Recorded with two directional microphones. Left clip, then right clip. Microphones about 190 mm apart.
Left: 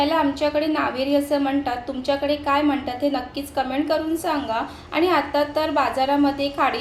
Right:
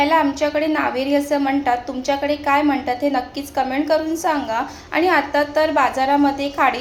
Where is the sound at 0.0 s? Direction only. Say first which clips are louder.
Right 4 dB; centre (ahead or behind).